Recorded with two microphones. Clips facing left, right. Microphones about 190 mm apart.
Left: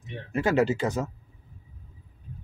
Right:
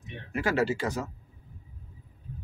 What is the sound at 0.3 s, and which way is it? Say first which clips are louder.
Speech: left 4 dB; 25° left (ahead or behind).